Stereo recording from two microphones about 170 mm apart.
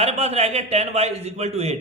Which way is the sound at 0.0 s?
40° right (ahead or behind).